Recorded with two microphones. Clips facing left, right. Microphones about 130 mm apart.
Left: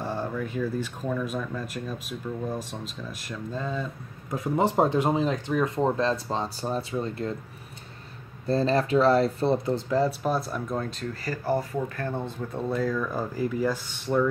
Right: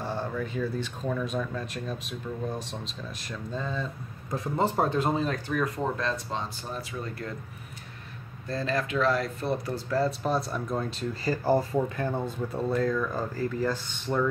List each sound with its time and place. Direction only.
0.0 s speech: 5° left (ahead or behind)
4.7 s speech: 15° left (ahead or behind)
8.5 s speech: 30° left (ahead or behind)
10.2 s speech: 5° left (ahead or behind)
11.4 s speech: 30° right (ahead or behind)
12.0 s speech: 10° right (ahead or behind)
12.5 s speech: centre (ahead or behind)